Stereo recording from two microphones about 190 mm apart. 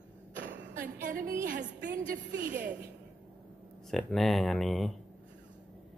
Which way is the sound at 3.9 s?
Centre (ahead or behind).